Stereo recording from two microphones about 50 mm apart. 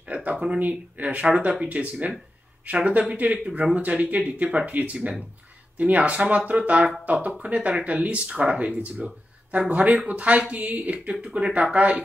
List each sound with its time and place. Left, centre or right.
0.1 s speech: right